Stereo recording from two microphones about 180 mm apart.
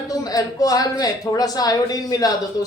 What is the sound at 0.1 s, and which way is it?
Speech, 20° left (ahead or behind).